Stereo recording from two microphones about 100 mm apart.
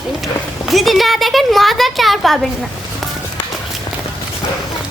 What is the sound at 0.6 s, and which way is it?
Speech, centre (ahead or behind).